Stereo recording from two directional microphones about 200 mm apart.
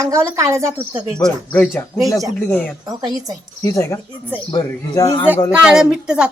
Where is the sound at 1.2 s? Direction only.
5° left (ahead or behind).